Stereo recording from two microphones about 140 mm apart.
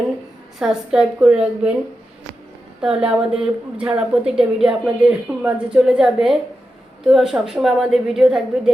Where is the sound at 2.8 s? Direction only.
5° right (ahead or behind).